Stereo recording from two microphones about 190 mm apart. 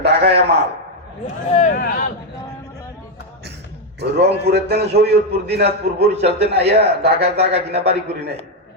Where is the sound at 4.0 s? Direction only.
60° right (ahead or behind).